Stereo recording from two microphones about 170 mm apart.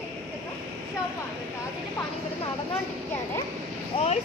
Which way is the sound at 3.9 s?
30° left (ahead or behind).